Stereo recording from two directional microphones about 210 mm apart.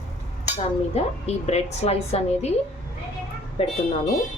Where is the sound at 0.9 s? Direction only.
30° left (ahead or behind).